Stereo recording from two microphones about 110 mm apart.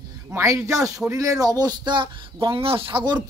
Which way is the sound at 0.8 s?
5° right (ahead or behind).